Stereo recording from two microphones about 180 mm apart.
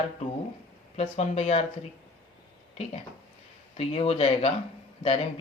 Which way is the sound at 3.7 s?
35° left (ahead or behind).